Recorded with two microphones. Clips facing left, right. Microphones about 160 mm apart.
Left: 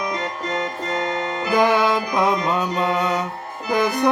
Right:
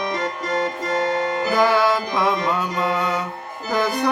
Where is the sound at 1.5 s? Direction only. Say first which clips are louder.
Left 1 dB; 20° left (ahead or behind).